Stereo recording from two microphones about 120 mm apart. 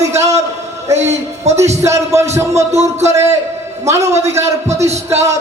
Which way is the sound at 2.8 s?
25° right (ahead or behind).